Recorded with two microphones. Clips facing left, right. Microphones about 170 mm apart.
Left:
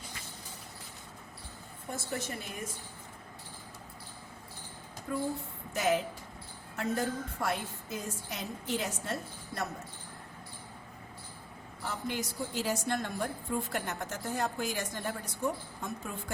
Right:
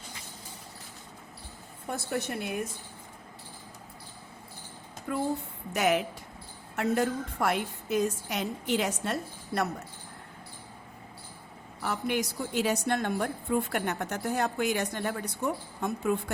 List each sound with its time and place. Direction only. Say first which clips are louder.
1.9 s a woman's voice: right 5 dB; 65° right (ahead or behind)
5.1 s a woman's voice: right 4 dB; 75° right (ahead or behind)
11.8 s a woman's voice: right 6 dB; 70° right (ahead or behind)